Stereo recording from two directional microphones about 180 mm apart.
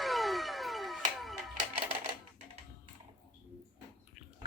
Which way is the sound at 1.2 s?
Centre (ahead or behind).